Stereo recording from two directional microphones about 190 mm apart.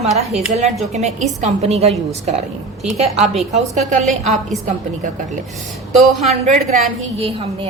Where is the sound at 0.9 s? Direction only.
35° right (ahead or behind).